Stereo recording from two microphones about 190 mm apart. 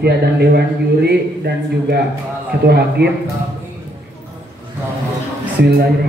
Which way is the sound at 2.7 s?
60° right (ahead or behind).